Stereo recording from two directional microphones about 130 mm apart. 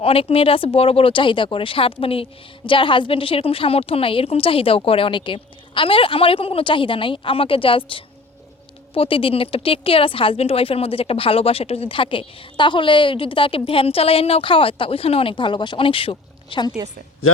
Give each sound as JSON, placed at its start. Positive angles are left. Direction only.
{"t": 0.0, "sound": "speech", "side_deg": 45}